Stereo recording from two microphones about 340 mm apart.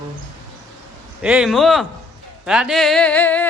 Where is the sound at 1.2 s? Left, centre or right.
Centre.